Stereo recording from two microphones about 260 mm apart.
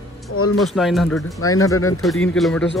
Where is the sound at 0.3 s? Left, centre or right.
Left.